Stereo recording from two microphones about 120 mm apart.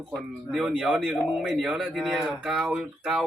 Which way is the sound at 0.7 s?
5° right (ahead or behind).